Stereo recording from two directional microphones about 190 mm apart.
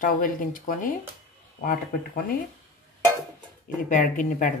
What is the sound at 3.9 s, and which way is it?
Speech, 45° left (ahead or behind).